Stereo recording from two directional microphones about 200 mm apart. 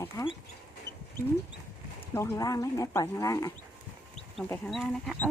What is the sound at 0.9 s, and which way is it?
Chicken, 15° left (ahead or behind).